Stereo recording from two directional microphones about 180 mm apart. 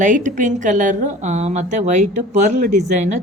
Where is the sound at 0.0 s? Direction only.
45° right (ahead or behind).